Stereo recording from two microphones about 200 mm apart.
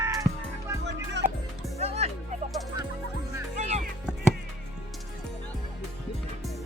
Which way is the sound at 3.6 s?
35° right (ahead or behind).